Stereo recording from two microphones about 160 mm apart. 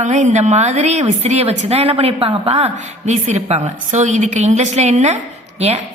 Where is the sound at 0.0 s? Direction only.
50° right (ahead or behind).